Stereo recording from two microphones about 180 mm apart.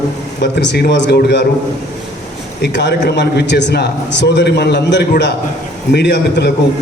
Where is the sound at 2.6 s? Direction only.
75° left (ahead or behind).